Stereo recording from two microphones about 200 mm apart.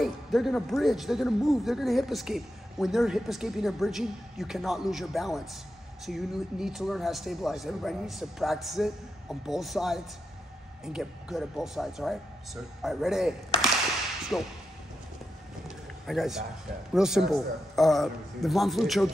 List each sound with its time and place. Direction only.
0.0 s speech: centre (ahead or behind)
14.3 s speech: centre (ahead or behind)
16.1 s speech: centre (ahead or behind)